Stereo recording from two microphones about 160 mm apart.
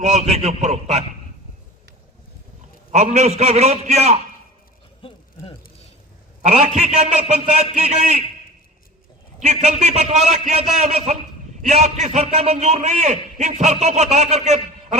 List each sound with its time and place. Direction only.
0.0 s a man's voice: 45° right (ahead or behind)
2.9 s a man's voice: 45° right (ahead or behind)
5.0 s a sound: 35° left (ahead or behind)
6.4 s a man's voice: 45° right (ahead or behind)
9.4 s a man's voice: 45° right (ahead or behind)